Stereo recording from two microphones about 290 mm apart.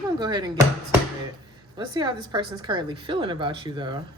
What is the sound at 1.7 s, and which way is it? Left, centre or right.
Speech, centre.